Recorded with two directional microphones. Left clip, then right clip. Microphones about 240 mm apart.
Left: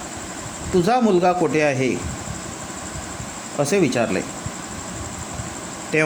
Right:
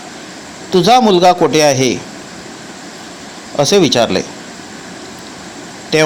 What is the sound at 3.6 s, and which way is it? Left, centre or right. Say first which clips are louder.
Speech: right 9 dB; centre.